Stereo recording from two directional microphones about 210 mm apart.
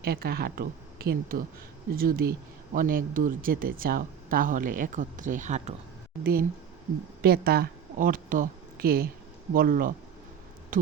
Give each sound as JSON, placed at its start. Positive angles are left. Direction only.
{"t": 0.0, "sound": "speech", "side_deg": -50}
{"t": 7.2, "sound": "speech", "side_deg": -45}